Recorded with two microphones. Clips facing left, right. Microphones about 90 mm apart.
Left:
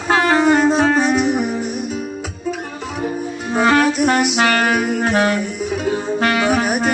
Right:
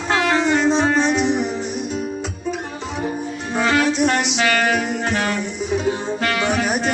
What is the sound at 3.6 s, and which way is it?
Music, 45° left (ahead or behind).